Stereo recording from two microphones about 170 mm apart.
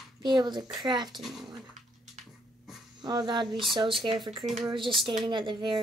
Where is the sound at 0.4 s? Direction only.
25° right (ahead or behind).